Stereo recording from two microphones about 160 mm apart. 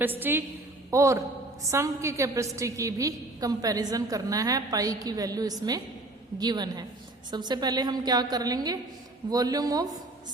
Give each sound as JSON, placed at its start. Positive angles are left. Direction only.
{"t": 0.0, "sound": "a woman's voice", "side_deg": -10}